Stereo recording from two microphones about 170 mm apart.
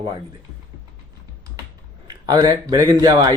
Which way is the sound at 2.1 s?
25° right (ahead or behind).